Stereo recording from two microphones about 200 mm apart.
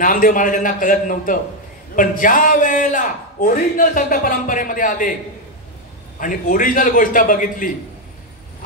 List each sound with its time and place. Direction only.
0.0 s a man's voice: 40° left (ahead or behind)
6.1 s a man's voice: 45° left (ahead or behind)